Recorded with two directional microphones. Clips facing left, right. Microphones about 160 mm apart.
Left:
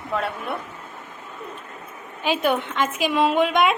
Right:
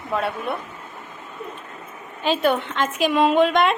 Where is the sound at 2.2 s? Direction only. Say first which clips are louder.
Right 2 dB; 10° left (ahead or behind).